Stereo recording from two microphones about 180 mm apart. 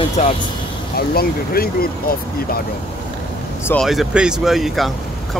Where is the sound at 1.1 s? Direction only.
55° left (ahead or behind).